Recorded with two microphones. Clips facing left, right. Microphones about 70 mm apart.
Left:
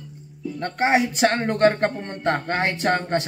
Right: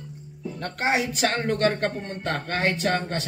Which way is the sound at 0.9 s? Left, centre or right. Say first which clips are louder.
Left 5 dB; left.